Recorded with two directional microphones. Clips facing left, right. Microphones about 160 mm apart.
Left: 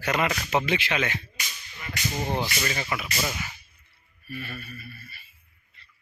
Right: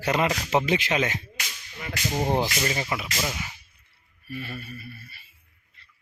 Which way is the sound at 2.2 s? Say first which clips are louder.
Right 4 dB; 20° right (ahead or behind).